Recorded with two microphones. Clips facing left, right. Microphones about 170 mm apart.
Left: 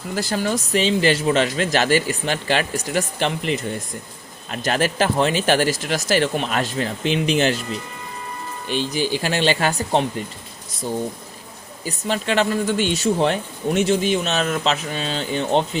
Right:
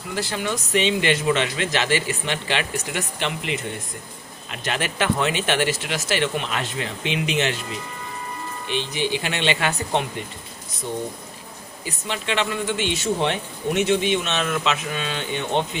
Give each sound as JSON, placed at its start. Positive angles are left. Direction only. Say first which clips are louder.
{"t": 0.2, "sound": "speech", "louder": "left 4 dB", "side_deg": 40}
{"t": 8.6, "sound": "speech", "louder": "left 3 dB", "side_deg": 40}
{"t": 11.9, "sound": "speech", "louder": "left 5 dB", "side_deg": 40}